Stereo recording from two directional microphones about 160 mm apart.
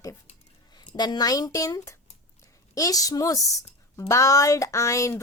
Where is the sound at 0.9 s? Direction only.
25° left (ahead or behind).